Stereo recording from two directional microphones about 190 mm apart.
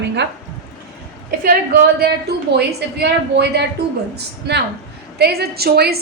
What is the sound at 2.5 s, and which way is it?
A woman's voice, 60° right (ahead or behind).